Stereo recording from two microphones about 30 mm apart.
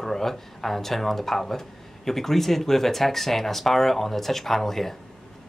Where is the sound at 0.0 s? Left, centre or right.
Centre.